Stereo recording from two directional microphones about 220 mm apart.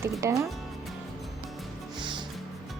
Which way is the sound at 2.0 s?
20° right (ahead or behind).